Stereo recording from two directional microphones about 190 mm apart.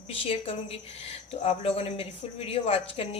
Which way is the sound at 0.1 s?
30° left (ahead or behind).